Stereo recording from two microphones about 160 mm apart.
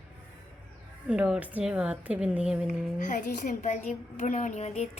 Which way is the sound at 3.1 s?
55° left (ahead or behind).